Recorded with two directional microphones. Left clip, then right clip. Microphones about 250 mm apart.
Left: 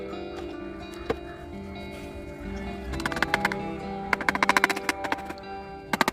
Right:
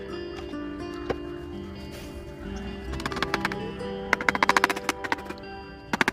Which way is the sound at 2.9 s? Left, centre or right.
Centre.